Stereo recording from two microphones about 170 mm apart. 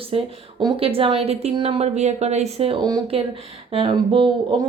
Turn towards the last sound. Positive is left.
turn(degrees=-30)  # may be behind; listen again after turning